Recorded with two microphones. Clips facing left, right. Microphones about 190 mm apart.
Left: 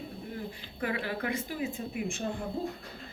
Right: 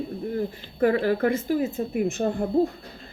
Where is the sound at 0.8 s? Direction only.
45° right (ahead or behind).